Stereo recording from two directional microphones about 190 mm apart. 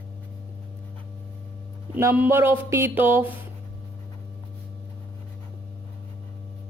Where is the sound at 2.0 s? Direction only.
10° right (ahead or behind).